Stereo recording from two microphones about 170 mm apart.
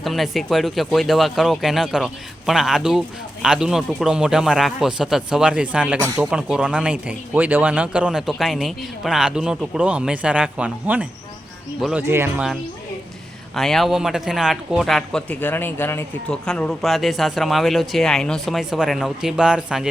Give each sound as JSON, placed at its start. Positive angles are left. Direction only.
{"t": 0.0, "sound": "speech", "side_deg": 0}
{"t": 6.0, "sound": "speech", "side_deg": -20}
{"t": 6.3, "sound": "speech", "side_deg": -5}
{"t": 13.6, "sound": "speech", "side_deg": 0}